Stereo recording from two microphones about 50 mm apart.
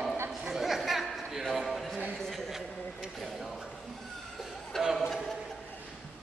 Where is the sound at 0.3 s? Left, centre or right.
Centre.